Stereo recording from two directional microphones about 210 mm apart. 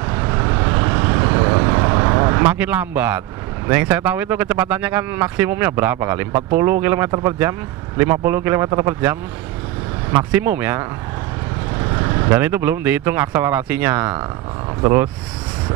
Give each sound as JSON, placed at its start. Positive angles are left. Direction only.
{"t": 0.0, "sound": "vehicle", "side_deg": -20}
{"t": 2.5, "sound": "speech", "side_deg": -10}
{"t": 10.3, "sound": "speech", "side_deg": -10}